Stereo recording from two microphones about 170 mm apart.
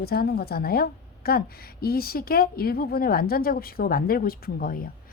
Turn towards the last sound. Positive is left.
turn(degrees=60)  # may be behind; listen again after turning